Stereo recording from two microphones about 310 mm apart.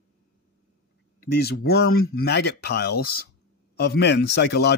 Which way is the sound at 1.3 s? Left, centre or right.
Left.